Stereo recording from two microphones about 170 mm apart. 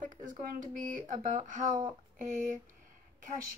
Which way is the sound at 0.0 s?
50° right (ahead or behind).